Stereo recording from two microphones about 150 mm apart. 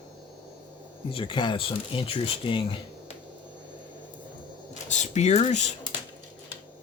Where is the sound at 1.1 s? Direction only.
35° left (ahead or behind).